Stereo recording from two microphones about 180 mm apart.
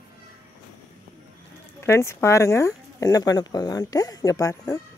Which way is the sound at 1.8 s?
15° left (ahead or behind).